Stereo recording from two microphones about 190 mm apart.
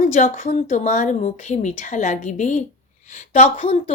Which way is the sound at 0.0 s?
40° left (ahead or behind).